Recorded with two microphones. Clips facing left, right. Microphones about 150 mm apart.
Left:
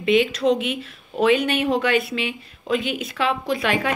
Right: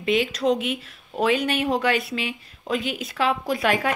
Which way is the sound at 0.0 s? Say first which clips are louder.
Left 3 dB; 40° right (ahead or behind).